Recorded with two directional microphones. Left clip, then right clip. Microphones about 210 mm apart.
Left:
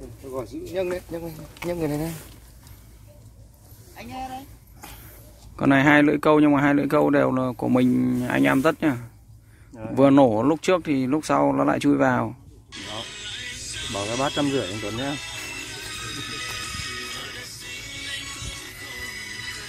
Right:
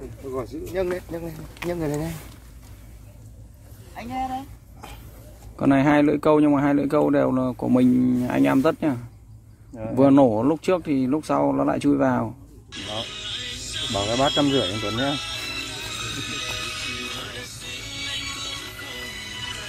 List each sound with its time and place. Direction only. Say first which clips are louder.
0.3 s speech: right 1 dB; 25° left (ahead or behind)
3.9 s speech: right 6 dB; 35° right (ahead or behind)
5.6 s speech: left 1 dB; 5° left (ahead or behind)
12.8 s music: right 3 dB; 15° right (ahead or behind)
14.4 s speech: right 3 dB; 10° right (ahead or behind)
15.7 s music: right 3 dB; 10° right (ahead or behind)